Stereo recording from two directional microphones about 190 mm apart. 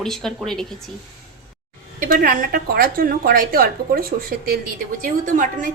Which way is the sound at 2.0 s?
50° right (ahead or behind).